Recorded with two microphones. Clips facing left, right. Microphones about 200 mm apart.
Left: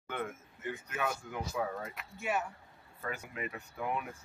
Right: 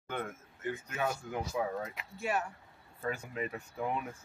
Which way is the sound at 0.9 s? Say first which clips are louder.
Even; 30° right (ahead or behind).